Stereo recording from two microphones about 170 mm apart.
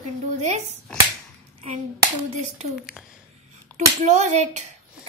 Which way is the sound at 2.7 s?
5° right (ahead or behind).